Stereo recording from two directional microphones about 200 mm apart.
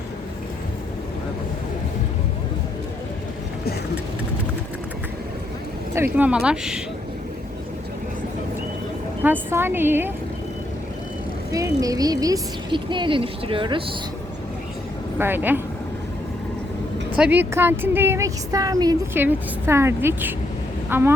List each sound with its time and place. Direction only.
5.9 s speech: 10° right (ahead or behind)
9.2 s a woman's voice: 10° right (ahead or behind)
11.5 s a woman's voice: 15° right (ahead or behind)
15.2 s a woman's voice: 10° right (ahead or behind)
17.2 s a woman's voice: 10° right (ahead or behind)